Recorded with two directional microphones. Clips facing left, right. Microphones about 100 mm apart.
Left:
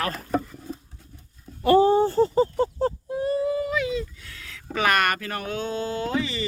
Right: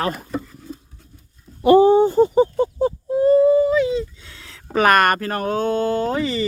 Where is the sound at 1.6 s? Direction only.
20° right (ahead or behind).